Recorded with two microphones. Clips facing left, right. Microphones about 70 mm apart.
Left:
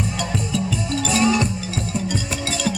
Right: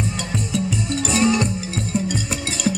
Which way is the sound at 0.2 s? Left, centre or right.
Right.